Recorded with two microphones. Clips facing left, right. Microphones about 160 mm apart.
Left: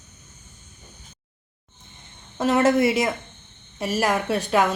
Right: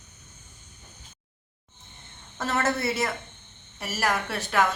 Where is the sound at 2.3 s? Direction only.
15° left (ahead or behind).